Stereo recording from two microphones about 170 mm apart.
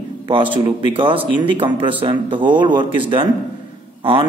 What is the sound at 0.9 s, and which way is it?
A man's voice, 30° right (ahead or behind).